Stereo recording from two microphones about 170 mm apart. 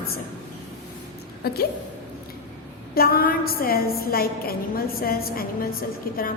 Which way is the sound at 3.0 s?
60° left (ahead or behind).